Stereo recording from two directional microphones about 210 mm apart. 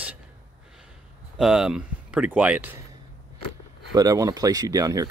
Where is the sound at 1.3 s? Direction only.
Centre (ahead or behind).